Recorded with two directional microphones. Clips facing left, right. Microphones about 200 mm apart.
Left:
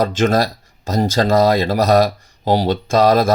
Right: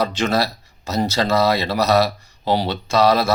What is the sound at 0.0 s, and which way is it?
Speech, 50° left (ahead or behind).